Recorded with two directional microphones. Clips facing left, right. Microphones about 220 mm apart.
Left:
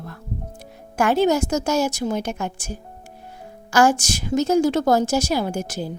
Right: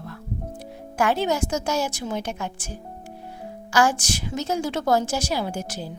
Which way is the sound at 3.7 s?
45° left (ahead or behind).